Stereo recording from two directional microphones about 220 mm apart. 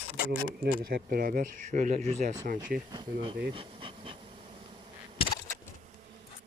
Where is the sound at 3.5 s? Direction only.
25° right (ahead or behind).